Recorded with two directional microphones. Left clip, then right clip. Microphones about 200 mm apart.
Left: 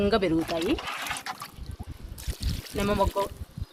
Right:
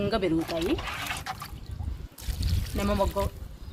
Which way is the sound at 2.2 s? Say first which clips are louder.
Even; centre (ahead or behind).